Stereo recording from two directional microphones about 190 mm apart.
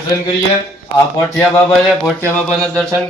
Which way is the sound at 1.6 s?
Centre (ahead or behind).